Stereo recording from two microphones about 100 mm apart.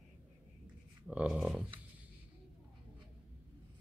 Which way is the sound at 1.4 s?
Centre (ahead or behind).